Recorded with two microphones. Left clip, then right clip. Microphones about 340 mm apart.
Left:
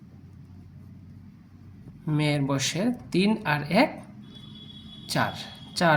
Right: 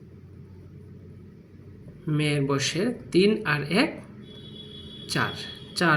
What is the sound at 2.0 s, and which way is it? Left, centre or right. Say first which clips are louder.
Speech: right 1 dB; left.